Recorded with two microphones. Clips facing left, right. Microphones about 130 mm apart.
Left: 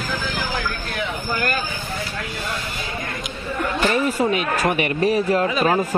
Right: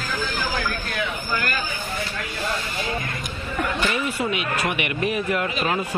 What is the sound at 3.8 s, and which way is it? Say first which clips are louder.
Speech: left 9 dB; 40° left (ahead or behind).